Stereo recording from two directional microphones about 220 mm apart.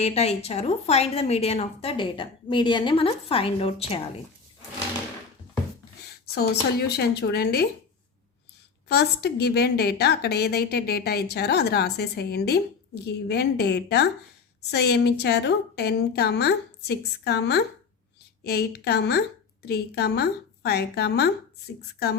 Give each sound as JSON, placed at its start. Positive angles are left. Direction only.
{"t": 0.0, "sound": "a woman's voice", "side_deg": 30}
{"t": 6.3, "sound": "a woman's voice", "side_deg": 50}
{"t": 8.9, "sound": "a woman's voice", "side_deg": 50}